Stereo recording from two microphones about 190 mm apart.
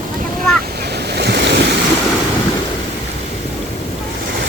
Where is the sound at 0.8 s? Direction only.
60° right (ahead or behind).